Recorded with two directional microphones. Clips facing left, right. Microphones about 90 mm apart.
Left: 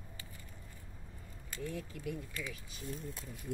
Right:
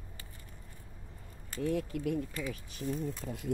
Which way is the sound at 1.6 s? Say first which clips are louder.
Right 10 dB; 70° right (ahead or behind).